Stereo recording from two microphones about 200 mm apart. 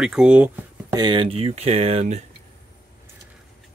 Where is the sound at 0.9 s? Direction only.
25° right (ahead or behind).